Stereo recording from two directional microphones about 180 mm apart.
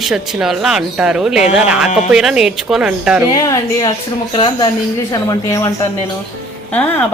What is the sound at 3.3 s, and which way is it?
Speech, 20° left (ahead or behind).